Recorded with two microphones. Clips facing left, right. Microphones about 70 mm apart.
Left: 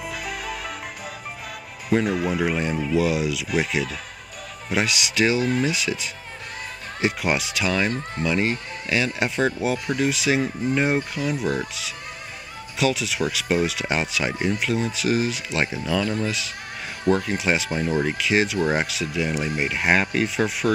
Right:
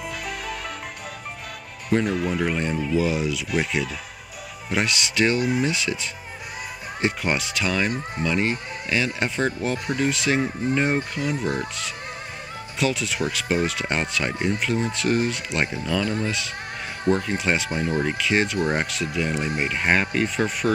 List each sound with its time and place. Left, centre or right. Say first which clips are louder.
0.0 s music: even; centre
1.9 s speech: left 1 dB; centre